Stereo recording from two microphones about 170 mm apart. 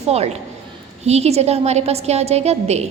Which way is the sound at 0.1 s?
40° right (ahead or behind).